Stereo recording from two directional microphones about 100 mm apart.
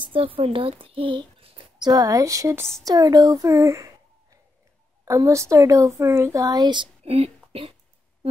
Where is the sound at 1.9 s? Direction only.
40° right (ahead or behind).